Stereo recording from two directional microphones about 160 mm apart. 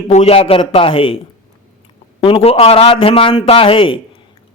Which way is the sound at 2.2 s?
35° left (ahead or behind).